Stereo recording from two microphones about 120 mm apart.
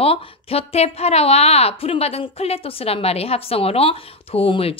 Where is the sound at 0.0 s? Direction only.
55° left (ahead or behind).